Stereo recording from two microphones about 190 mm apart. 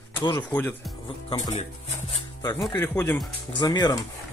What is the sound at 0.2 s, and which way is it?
Speech, 25° left (ahead or behind).